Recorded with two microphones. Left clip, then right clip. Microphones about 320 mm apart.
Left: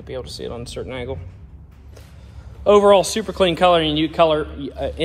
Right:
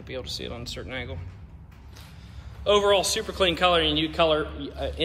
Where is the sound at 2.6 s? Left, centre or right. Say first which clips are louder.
Left 8 dB; centre.